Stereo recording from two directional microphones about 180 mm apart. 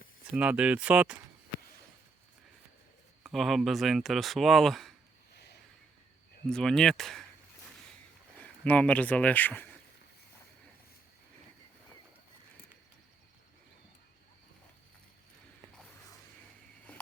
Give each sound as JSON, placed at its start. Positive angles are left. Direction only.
{"t": 0.3, "sound": "speech", "side_deg": -5}
{"t": 3.2, "sound": "speech", "side_deg": 0}
{"t": 5.3, "sound": "a sound", "side_deg": 65}
{"t": 6.5, "sound": "speech", "side_deg": 5}
{"t": 8.4, "sound": "speech", "side_deg": 5}